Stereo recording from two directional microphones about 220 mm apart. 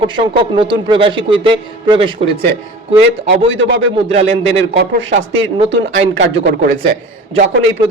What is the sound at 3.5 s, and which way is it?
Speech, 60° right (ahead or behind).